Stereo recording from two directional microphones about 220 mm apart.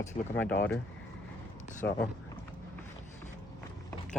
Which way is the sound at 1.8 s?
10° left (ahead or behind).